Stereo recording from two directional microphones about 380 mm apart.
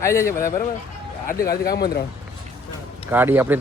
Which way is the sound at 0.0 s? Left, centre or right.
Centre.